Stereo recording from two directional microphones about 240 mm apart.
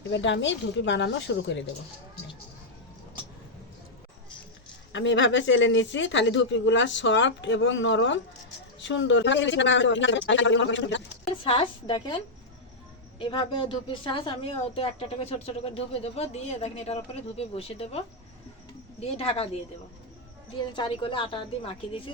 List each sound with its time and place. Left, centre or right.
0.1 s speech: left
4.9 s speech: left
11.4 s a woman's voice: left
20.6 s a woman's voice: centre